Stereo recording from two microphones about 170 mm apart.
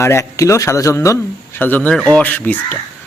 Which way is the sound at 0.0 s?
15° left (ahead or behind).